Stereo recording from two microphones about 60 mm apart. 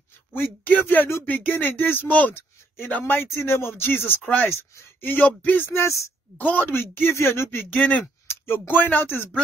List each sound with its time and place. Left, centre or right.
0.3 s speech: left
3.4 s speech: left
4.5 s speech: left
5.0 s speech: left
5.7 s speech: left
6.3 s speech: left
6.7 s speech: left
7.7 s speech: left
8.3 s speech: left